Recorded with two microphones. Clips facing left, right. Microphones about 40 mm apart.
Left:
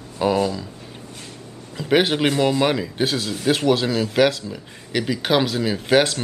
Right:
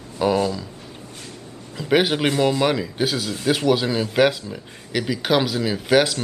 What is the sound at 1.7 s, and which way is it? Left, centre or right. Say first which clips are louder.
Speech: even; centre.